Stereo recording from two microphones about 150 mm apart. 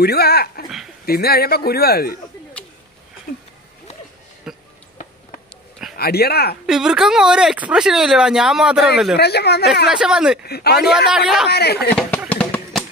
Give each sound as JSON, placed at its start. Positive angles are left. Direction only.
{"t": 0.0, "sound": "speech", "side_deg": 90}
{"t": 4.5, "sound": "a sound", "side_deg": -5}
{"t": 5.9, "sound": "speech", "side_deg": 90}
{"t": 6.6, "sound": "speech", "side_deg": -5}
{"t": 9.1, "sound": "speech", "side_deg": 90}
{"t": 9.8, "sound": "speech", "side_deg": -5}
{"t": 10.4, "sound": "speech", "side_deg": 90}
{"t": 11.1, "sound": "speech", "side_deg": -5}
{"t": 11.4, "sound": "speech", "side_deg": 90}
{"t": 11.9, "sound": "speech", "side_deg": 5}
{"t": 12.3, "sound": "a sound", "side_deg": 10}